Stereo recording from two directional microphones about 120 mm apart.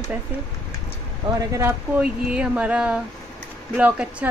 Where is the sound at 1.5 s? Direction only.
20° right (ahead or behind).